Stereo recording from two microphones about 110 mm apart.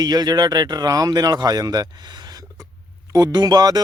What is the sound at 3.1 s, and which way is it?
Speech, 35° right (ahead or behind).